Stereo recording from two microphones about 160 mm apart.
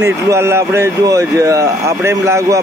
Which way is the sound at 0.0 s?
15° right (ahead or behind).